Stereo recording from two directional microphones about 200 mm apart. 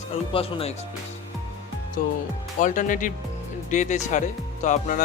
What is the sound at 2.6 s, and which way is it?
Speech, 40° left (ahead or behind).